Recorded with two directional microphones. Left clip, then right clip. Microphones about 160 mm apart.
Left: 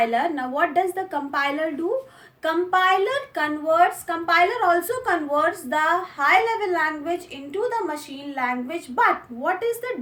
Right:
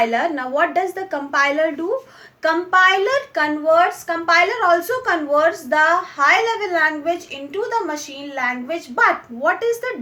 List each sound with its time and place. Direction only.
0.0 s a woman's voice: 45° right (ahead or behind)